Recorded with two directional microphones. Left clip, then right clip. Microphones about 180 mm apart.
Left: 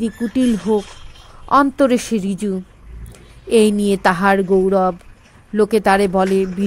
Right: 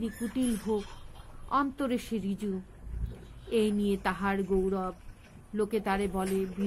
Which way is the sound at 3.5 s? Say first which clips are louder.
Left 15 dB; 50° left (ahead or behind).